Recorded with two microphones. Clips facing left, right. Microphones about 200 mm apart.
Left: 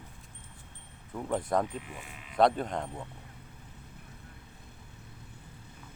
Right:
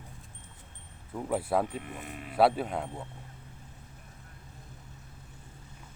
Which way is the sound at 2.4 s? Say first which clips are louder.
Right 1 dB; 5° right (ahead or behind).